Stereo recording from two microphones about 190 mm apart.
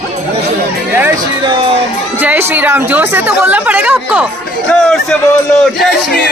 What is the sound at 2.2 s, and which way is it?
A woman's voice, 10° right (ahead or behind).